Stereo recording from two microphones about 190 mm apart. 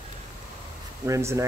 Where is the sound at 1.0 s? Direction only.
15° right (ahead or behind).